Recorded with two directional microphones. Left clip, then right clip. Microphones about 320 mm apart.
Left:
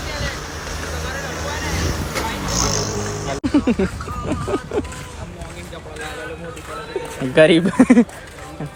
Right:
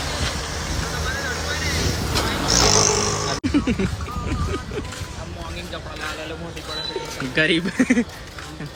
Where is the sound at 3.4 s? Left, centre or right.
Centre.